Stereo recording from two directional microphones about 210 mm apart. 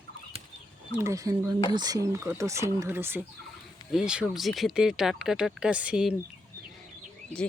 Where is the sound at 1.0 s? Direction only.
15° right (ahead or behind).